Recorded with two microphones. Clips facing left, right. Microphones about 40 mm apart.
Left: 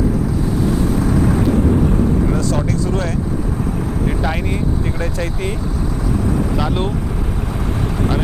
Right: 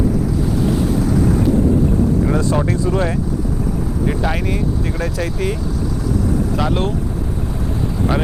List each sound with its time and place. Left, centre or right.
1.2 s vehicle: left
2.3 s speech: right
4.0 s speech: centre
6.6 s speech: centre